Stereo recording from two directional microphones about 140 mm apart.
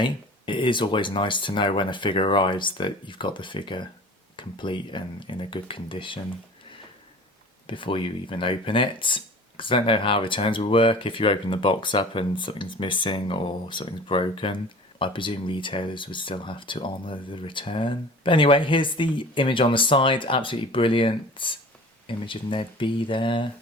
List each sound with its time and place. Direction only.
0.0 s speech: 35° left (ahead or behind)
7.7 s speech: 35° left (ahead or behind)